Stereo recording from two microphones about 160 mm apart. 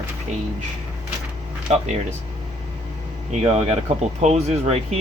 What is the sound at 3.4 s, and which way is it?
Speech, 40° right (ahead or behind).